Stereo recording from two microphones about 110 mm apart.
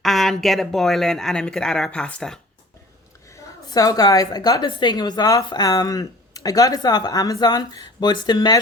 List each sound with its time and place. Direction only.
0.0 s speech: centre (ahead or behind)
3.3 s a woman's voice: 35° left (ahead or behind)